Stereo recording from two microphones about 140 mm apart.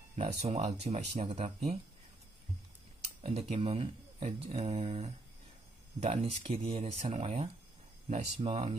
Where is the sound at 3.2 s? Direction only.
45° right (ahead or behind).